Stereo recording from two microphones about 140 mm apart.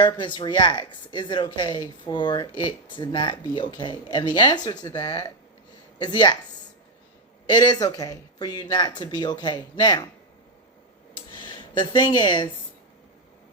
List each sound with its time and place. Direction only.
0.0 s speech: 35° left (ahead or behind)
7.4 s speech: 35° left (ahead or behind)
11.3 s speech: 35° left (ahead or behind)